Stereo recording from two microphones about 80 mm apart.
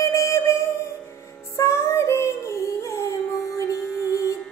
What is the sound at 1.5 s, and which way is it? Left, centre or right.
Music, left.